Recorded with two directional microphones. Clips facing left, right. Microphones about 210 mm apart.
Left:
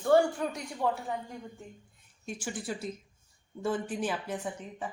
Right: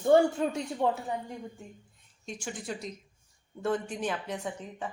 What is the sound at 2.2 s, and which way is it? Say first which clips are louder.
A woman's voice: left 1 dB; 5° left (ahead or behind).